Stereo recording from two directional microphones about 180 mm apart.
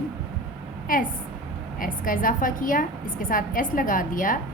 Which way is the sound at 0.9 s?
50° left (ahead or behind).